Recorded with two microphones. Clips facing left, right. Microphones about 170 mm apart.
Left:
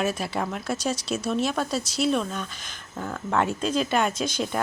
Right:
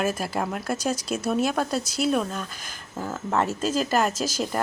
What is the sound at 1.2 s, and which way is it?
Speech, 5° right (ahead or behind).